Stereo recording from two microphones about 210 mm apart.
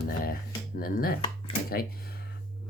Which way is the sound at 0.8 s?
45° left (ahead or behind).